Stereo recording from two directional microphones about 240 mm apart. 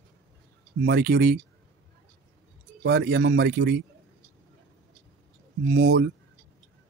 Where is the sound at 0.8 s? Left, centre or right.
Right.